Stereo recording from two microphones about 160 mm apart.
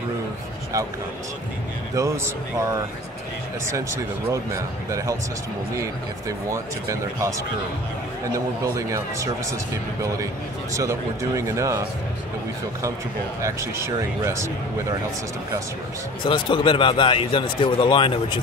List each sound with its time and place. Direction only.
2.0 s speech: 20° right (ahead or behind)
4.3 s speech: 20° right (ahead or behind)
8.7 s speech: 20° right (ahead or behind)
10.7 s speech: 20° right (ahead or behind)
13.4 s speech: 20° right (ahead or behind)
16.2 s a man's voice: 30° left (ahead or behind)